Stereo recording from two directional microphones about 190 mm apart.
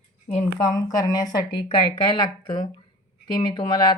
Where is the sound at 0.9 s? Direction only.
20° left (ahead or behind).